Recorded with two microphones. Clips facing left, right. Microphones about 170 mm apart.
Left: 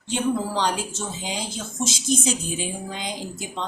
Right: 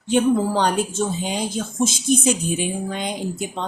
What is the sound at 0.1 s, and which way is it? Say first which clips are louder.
A woman's voice: right 6 dB; 55° right (ahead or behind).